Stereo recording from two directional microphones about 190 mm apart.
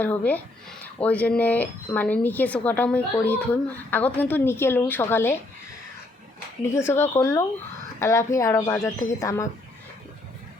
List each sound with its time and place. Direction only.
0.0 s a woman's voice: 10° left (ahead or behind)
6.7 s a woman's voice: 15° left (ahead or behind)